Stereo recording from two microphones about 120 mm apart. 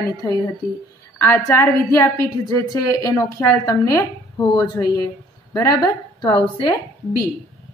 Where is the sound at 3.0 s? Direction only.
25° left (ahead or behind).